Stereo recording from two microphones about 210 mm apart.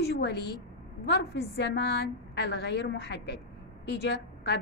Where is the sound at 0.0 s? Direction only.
50° left (ahead or behind).